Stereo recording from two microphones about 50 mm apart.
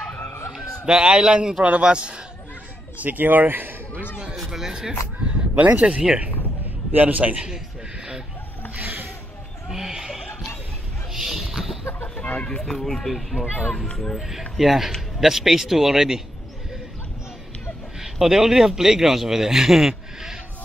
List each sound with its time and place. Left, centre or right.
0.8 s a man's voice: centre
3.0 s a man's voice: right
4.5 s a man's voice: centre
5.2 s speech: right
6.9 s a man's voice: right
8.7 s a sound: right
9.7 s a sound: centre
12.2 s speech: left
12.6 s speech: centre
13.8 s speech: centre
14.6 s a man's voice: centre
18.0 s a man's voice: centre